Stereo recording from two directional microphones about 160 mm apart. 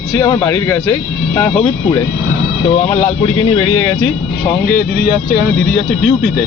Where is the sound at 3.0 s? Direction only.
35° left (ahead or behind).